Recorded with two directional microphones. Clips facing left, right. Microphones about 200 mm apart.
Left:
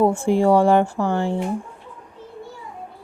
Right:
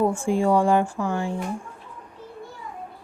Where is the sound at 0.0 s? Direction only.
65° left (ahead or behind).